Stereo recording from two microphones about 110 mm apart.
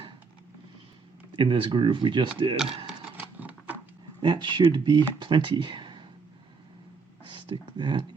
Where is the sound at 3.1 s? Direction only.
15° right (ahead or behind).